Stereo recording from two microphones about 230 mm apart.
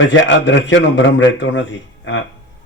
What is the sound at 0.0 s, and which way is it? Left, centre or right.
Speech, left.